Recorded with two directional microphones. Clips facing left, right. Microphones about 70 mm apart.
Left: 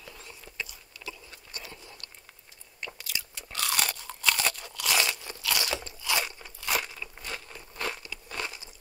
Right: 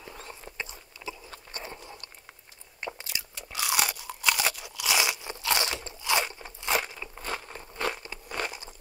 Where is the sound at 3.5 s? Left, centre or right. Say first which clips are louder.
Right 2 dB; centre.